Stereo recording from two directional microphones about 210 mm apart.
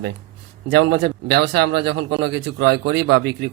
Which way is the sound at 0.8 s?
55° right (ahead or behind).